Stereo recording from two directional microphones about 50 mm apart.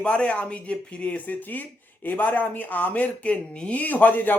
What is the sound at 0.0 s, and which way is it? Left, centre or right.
Speech, left.